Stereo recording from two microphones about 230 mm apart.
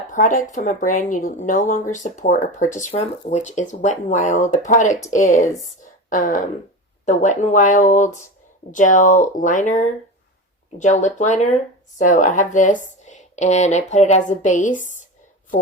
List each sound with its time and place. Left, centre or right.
0.1 s speech: left
6.1 s a woman's voice: left